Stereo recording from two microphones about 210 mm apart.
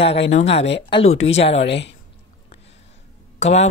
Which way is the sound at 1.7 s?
55° left (ahead or behind).